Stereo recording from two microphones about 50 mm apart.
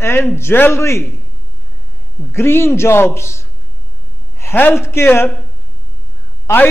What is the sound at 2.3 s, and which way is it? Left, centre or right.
A man's voice, left.